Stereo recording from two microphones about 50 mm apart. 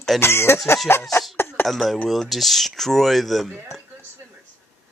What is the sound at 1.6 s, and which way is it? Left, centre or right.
Speech, centre.